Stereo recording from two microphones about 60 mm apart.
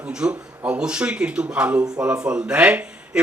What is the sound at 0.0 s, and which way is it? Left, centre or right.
Speech, centre.